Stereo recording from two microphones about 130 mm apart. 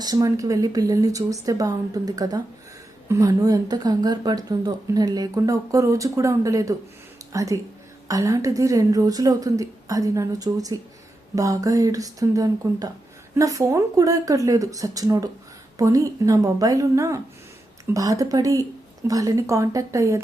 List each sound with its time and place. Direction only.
0.0 s speech: 30° right (ahead or behind)